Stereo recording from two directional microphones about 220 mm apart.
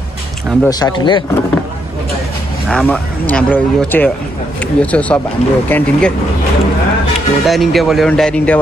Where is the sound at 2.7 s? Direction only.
5° left (ahead or behind).